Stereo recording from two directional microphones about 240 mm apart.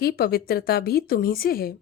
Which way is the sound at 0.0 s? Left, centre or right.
Left.